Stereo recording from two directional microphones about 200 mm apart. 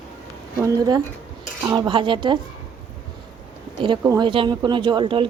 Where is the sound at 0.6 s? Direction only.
20° right (ahead or behind).